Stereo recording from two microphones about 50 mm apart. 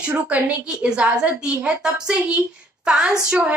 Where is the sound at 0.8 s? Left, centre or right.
Centre.